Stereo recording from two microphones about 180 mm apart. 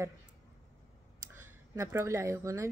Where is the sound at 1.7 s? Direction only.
15° right (ahead or behind).